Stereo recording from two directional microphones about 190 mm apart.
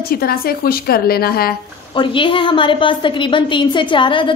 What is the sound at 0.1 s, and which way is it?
A woman's voice, 50° left (ahead or behind).